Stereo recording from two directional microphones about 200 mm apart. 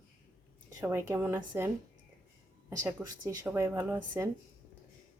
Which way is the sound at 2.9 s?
10° right (ahead or behind).